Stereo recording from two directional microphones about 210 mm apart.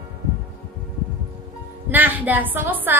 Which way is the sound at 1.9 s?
10° right (ahead or behind).